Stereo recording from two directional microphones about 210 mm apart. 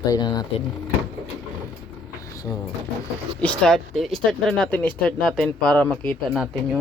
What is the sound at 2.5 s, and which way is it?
Speech, 10° left (ahead or behind).